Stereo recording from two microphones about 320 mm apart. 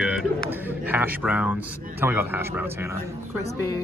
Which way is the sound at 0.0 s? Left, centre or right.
Centre.